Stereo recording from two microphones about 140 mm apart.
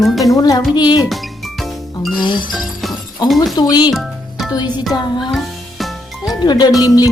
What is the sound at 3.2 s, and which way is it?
Speech, centre (ahead or behind).